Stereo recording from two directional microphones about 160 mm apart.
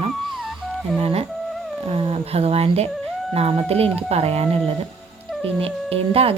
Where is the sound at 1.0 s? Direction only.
40° right (ahead or behind).